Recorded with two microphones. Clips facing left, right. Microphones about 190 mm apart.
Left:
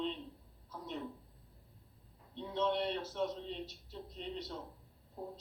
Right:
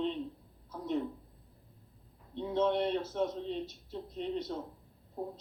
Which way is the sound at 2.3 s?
50° right (ahead or behind).